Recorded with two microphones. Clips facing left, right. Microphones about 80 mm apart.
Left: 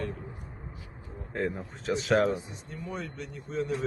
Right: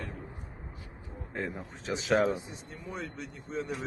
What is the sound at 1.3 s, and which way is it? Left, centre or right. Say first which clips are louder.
Speech: left 5 dB; centre.